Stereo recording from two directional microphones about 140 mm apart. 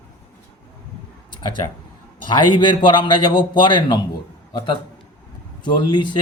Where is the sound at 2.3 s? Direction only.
35° left (ahead or behind).